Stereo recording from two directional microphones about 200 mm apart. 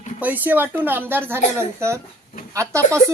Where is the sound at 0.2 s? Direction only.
10° right (ahead or behind).